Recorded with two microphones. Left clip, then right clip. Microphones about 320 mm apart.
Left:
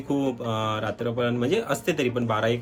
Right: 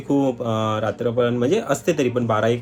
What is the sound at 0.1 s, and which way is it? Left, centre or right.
Speech, centre.